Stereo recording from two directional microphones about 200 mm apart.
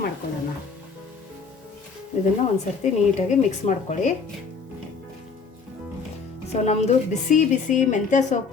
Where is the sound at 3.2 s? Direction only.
35° left (ahead or behind).